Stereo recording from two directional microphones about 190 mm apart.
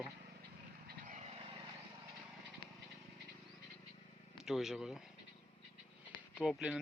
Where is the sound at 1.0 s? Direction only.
40° right (ahead or behind).